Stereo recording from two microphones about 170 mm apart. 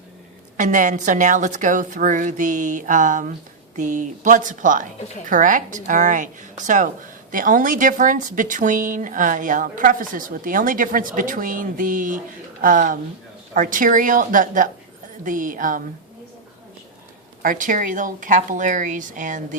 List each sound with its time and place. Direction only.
0.5 s a woman's voice: 50° right (ahead or behind)
17.4 s a woman's voice: 50° right (ahead or behind)